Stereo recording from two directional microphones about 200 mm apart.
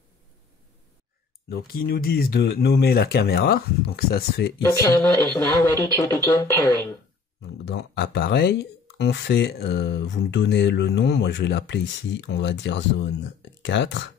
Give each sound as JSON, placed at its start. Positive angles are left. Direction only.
{"t": 1.5, "sound": "speech", "side_deg": 50}
{"t": 4.6, "sound": "speech", "side_deg": 10}
{"t": 7.6, "sound": "speech", "side_deg": 55}